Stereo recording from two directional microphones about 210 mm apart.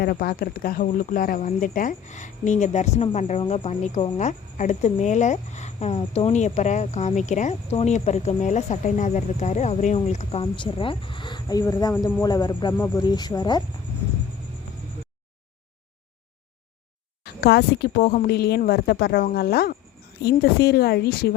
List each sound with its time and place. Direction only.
0.0 s speech: 45° left (ahead or behind); by 12.7 s 20° left (ahead or behind)
12.7 s speech: 10° left (ahead or behind)
17.2 s a woman's voice: 50° left (ahead or behind)